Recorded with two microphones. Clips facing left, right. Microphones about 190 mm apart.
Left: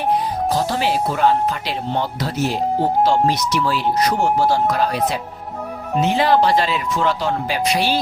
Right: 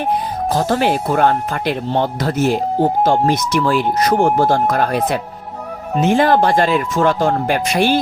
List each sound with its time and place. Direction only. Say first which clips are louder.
0.5 s speech: right 5 dB; 50° right (ahead or behind)